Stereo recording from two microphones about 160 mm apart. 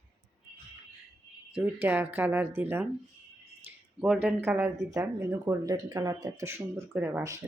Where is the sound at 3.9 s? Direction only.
5° right (ahead or behind).